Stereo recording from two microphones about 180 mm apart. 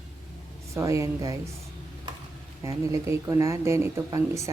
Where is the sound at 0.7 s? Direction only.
15° right (ahead or behind).